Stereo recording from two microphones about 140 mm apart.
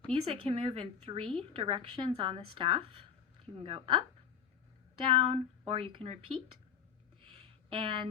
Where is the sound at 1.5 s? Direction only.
40° right (ahead or behind).